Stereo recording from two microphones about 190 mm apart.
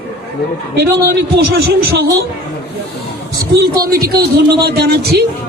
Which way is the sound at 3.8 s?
55° right (ahead or behind).